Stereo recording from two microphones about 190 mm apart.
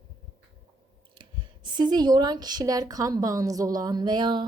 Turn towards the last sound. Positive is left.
turn(degrees=-25)  # may be behind; listen again after turning